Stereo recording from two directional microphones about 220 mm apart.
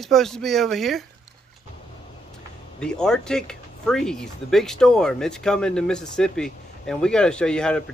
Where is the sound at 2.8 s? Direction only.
5° left (ahead or behind).